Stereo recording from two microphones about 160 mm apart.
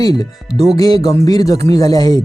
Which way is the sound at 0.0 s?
25° left (ahead or behind).